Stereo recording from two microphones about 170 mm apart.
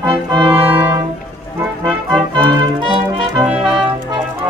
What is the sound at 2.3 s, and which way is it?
Music, 25° right (ahead or behind).